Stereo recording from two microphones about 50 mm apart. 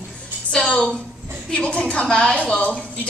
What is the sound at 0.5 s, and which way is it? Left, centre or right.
A woman's voice, left.